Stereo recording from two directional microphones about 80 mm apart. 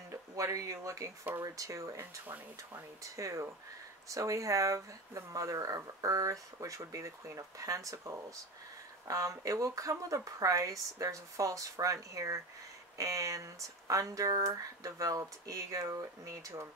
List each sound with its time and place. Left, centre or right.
0.1 s speech: right
2.2 s speech: right
3.0 s speech: right